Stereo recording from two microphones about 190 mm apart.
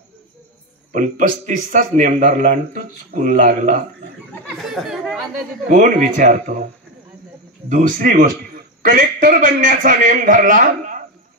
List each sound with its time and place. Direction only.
0.9 s a man's voice: 40° right (ahead or behind)
4.6 s chatter: centre (ahead or behind)
5.7 s a man's voice: 45° right (ahead or behind)
7.7 s a man's voice: 45° right (ahead or behind)